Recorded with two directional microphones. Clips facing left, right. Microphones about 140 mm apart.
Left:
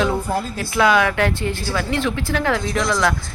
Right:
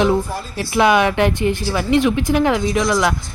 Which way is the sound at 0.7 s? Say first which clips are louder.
Right 2 dB; 20° right (ahead or behind).